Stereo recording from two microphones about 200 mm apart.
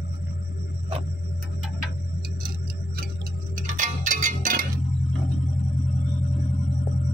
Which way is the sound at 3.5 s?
40° right (ahead or behind).